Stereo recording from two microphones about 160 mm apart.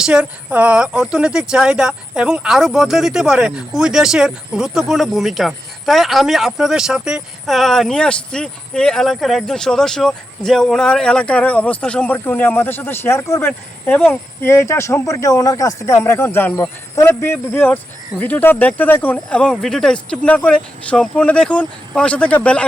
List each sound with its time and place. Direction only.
0.0 s speech: 5° right (ahead or behind)